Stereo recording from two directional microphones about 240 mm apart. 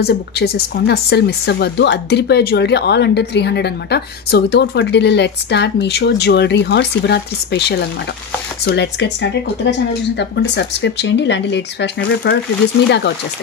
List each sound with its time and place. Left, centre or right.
0.0 s speech: left